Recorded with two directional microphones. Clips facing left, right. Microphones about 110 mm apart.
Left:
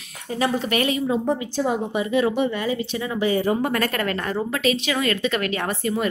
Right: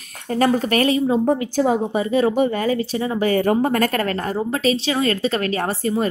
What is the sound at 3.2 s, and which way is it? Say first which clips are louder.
Speech: right 3 dB; 50° right (ahead or behind).